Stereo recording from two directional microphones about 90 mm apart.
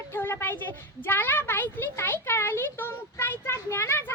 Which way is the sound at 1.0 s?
25° left (ahead or behind).